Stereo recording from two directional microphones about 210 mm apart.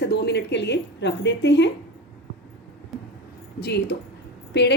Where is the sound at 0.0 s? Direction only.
55° left (ahead or behind).